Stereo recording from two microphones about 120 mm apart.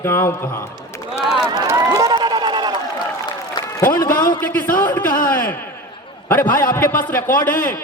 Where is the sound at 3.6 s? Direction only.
40° left (ahead or behind).